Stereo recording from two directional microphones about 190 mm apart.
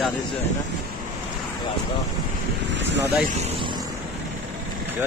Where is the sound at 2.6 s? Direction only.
65° right (ahead or behind).